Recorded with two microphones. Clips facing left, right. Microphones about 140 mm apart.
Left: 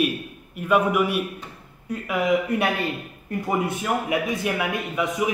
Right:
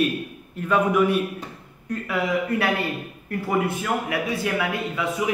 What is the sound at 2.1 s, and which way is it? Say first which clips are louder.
A man's voice: left 2 dB; 20° left (ahead or behind).